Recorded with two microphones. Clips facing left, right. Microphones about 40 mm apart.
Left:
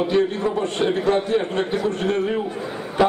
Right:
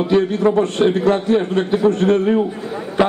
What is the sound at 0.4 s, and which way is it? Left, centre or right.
Speech, right.